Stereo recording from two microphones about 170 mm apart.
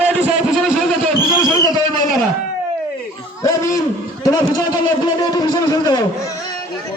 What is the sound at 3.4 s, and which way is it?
Hoot, 20° left (ahead or behind).